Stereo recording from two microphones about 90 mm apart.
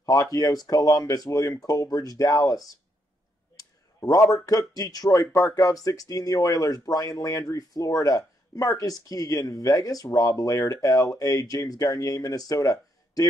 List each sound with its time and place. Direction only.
0.0 s speech: 40° left (ahead or behind)
3.5 s a sound: 40° left (ahead or behind)
4.5 s speech: 40° left (ahead or behind)